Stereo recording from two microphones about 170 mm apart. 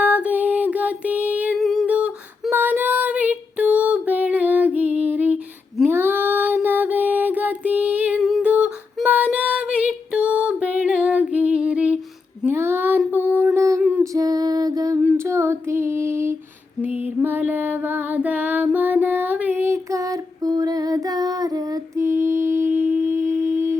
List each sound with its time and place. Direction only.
0.0 s music: 10° right (ahead or behind)
1.5 s female singing: centre (ahead or behind)
13.0 s a sound: 10° right (ahead or behind)
15.0 s female singing: 15° right (ahead or behind)